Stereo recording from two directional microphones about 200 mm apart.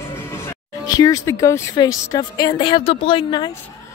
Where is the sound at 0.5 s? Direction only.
20° left (ahead or behind).